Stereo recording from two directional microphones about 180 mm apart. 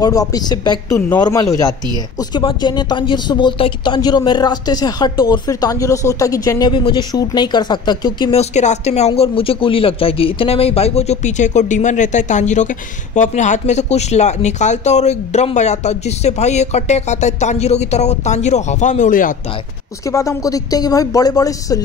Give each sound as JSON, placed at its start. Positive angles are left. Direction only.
{"t": 0.0, "sound": "speech", "side_deg": 20}
{"t": 8.4, "sound": "speech", "side_deg": 40}
{"t": 20.1, "sound": "speech", "side_deg": 15}